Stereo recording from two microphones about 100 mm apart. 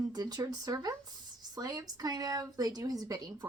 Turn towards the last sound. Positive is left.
turn(degrees=-40)  # may be behind; listen again after turning